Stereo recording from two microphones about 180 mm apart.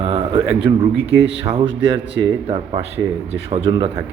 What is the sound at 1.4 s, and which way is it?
Speech, 30° right (ahead or behind).